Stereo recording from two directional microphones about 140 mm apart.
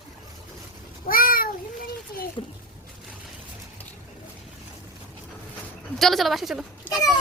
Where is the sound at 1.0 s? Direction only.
90° left.